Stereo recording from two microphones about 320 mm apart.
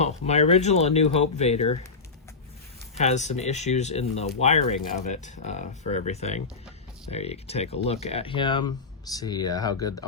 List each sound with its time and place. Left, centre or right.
0.0 s speech: left
3.0 s speech: left